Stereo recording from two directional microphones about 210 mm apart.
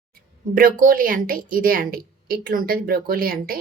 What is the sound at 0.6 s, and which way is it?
A woman's voice, 40° right (ahead or behind).